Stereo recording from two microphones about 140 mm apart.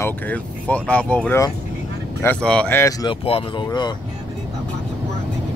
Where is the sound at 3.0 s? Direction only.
40° left (ahead or behind).